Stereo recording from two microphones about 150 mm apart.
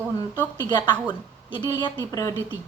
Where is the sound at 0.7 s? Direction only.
30° left (ahead or behind).